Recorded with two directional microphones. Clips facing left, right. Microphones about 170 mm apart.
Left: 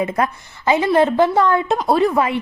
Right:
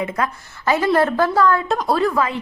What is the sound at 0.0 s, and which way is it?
A woman's voice, 25° left (ahead or behind).